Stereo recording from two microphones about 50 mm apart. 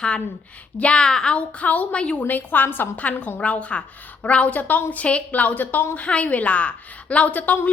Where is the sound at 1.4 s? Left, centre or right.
Left.